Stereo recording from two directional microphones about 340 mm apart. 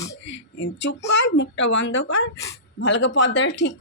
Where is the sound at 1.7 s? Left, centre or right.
Left.